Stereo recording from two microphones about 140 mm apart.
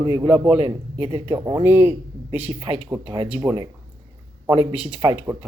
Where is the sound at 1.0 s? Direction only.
30° right (ahead or behind).